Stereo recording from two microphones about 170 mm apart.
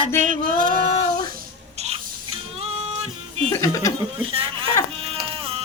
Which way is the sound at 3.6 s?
15° left (ahead or behind).